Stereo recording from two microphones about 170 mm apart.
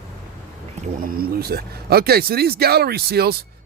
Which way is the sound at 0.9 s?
60° right (ahead or behind).